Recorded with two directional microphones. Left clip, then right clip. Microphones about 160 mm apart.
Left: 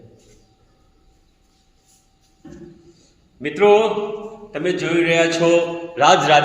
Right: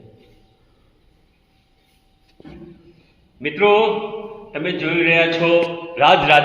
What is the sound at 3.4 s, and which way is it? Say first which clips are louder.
A man's voice: left 1 dB; 35° left (ahead or behind).